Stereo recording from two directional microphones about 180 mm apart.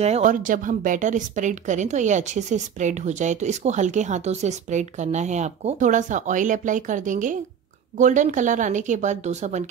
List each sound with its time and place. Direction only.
0.0 s a woman's voice: 40° right (ahead or behind)